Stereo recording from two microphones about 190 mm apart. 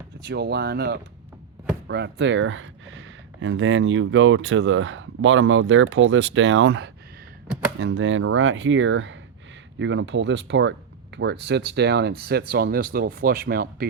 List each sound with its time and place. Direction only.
0.3 s speech: 60° right (ahead or behind)
7.4 s a sound: 5° right (ahead or behind)
7.8 s speech: 80° right; by 13.8 s 50° right (ahead or behind)